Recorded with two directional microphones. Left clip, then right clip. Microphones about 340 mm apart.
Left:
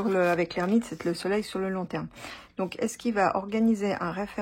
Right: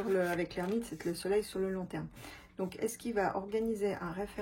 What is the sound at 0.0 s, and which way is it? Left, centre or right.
Speech, centre.